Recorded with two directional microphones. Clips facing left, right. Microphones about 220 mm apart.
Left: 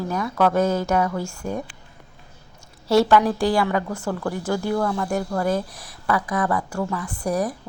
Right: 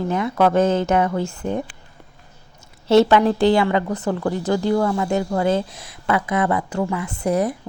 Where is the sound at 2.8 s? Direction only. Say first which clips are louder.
Right 3 dB; 20° right (ahead or behind).